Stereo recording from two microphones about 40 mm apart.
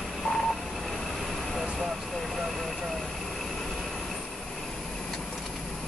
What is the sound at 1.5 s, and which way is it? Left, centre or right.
Vehicle, centre.